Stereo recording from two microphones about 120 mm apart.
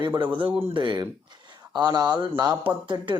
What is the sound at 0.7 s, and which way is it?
Speech, 40° right (ahead or behind).